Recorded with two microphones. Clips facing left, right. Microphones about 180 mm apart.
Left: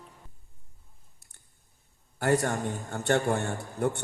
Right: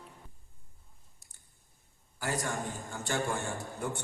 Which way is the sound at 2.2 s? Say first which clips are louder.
Left 8 dB; 60° left (ahead or behind).